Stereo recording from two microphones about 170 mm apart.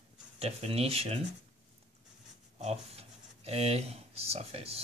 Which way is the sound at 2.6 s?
35° right (ahead or behind).